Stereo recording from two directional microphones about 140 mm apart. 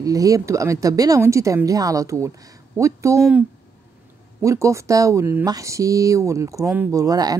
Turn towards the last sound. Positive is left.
turn(degrees=-25)  # may be behind; listen again after turning